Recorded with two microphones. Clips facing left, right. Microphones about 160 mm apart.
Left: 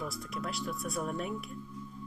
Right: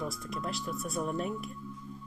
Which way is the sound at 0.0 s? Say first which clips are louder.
Right 2 dB; centre (ahead or behind).